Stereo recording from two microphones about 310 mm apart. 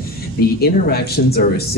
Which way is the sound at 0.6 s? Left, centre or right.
Left.